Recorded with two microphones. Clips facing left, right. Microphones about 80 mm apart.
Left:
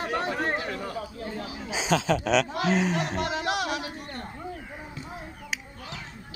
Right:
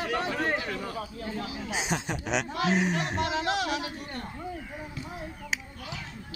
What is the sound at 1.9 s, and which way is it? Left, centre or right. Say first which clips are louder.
Speech: left 10 dB; left.